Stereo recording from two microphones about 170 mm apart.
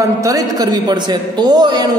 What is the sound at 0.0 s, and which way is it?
A man's voice, 20° right (ahead or behind).